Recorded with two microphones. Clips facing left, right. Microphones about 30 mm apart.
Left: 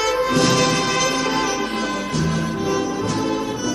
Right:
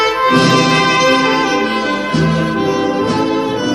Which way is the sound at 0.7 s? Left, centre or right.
Right.